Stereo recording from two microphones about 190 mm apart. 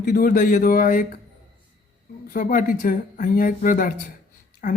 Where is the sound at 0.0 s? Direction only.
45° left (ahead or behind).